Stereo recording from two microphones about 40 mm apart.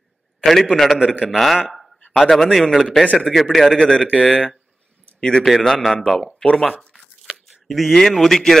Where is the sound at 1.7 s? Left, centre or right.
Centre.